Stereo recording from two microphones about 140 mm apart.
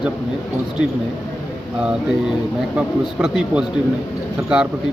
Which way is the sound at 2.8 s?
5° right (ahead or behind).